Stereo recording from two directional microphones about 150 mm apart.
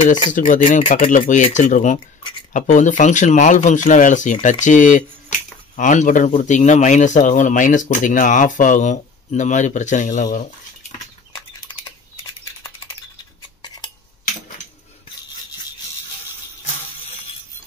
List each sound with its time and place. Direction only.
0.3 s a man's voice: 60° left (ahead or behind)